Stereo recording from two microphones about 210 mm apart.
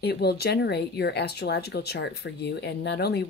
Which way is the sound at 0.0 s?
50° left (ahead or behind).